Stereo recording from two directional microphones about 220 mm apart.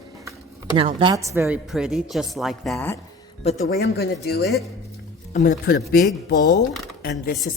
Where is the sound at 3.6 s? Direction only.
45° left (ahead or behind).